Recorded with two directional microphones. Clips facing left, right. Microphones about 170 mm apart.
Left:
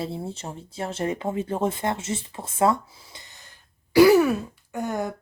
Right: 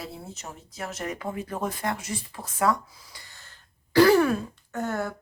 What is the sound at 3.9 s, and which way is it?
Speech, 10° left (ahead or behind).